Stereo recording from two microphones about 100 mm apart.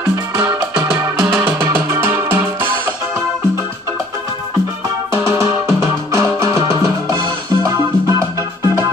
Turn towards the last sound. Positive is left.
turn(degrees=-35)  # may be behind; listen again after turning